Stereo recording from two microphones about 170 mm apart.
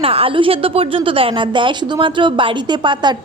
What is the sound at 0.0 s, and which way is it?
A woman's voice, 35° right (ahead or behind).